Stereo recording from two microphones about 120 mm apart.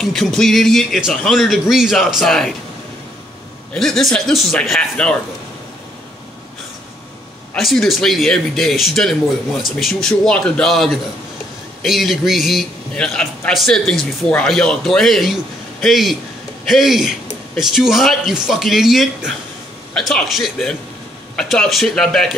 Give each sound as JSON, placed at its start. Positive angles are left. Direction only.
{"t": 0.0, "sound": "a man's voice", "side_deg": 0}
{"t": 3.7, "sound": "a man's voice", "side_deg": 5}
{"t": 7.5, "sound": "a man's voice", "side_deg": 0}